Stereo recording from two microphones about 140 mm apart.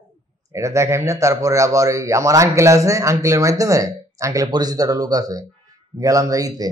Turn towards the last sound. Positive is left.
turn(degrees=-25)  # may be behind; listen again after turning